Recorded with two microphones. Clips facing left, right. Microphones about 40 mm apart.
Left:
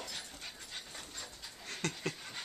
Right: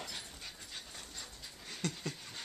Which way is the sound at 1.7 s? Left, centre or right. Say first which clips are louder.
Left 1 dB; centre.